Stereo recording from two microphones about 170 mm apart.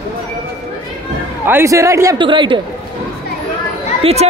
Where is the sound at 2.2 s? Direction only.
30° right (ahead or behind).